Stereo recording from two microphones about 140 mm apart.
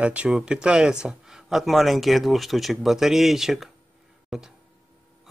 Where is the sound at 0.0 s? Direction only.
10° right (ahead or behind).